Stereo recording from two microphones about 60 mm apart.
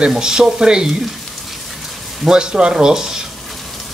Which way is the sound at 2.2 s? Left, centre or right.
Centre.